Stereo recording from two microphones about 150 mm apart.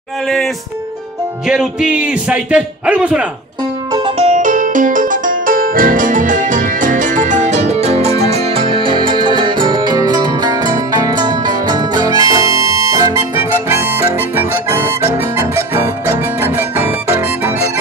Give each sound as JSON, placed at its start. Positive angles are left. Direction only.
{"t": 1.5, "sound": "a man's voice", "side_deg": -5}
{"t": 4.2, "sound": "music", "side_deg": -55}